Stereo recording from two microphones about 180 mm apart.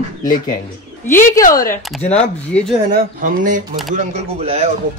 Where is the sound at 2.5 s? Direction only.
5° left (ahead or behind).